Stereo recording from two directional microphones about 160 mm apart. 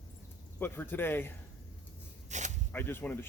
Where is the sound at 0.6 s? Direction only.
10° left (ahead or behind).